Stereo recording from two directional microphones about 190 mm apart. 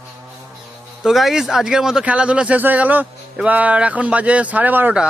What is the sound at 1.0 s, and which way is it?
Speech, centre (ahead or behind).